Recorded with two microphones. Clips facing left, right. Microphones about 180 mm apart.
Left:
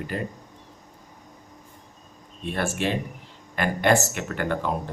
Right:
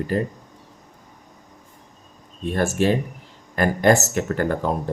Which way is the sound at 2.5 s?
40° right (ahead or behind).